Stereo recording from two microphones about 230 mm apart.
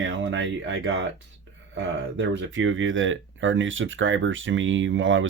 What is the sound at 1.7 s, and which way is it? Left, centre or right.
Speech, right.